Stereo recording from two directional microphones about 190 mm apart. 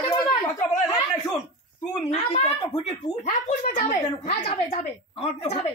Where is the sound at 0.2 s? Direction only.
20° left (ahead or behind).